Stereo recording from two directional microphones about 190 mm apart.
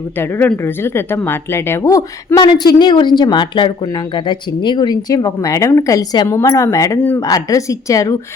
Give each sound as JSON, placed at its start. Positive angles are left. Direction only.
{"t": 0.2, "sound": "speech", "side_deg": 10}